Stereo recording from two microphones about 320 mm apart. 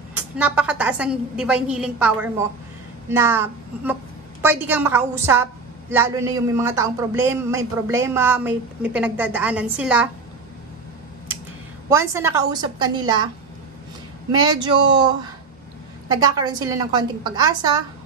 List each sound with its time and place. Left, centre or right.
0.4 s a woman's voice: centre
11.9 s a woman's voice: centre
14.4 s a woman's voice: centre